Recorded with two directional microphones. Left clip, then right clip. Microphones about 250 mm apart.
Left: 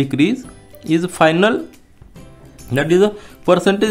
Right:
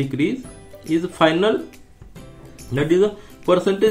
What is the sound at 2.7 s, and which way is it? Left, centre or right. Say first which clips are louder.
Speech: left 3 dB; left.